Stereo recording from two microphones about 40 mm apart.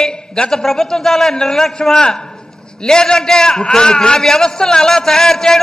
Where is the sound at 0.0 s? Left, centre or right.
Centre.